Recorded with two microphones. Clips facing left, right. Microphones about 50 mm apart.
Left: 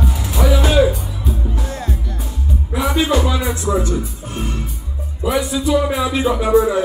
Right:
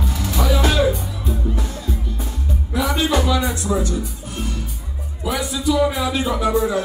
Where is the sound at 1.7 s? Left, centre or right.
Left.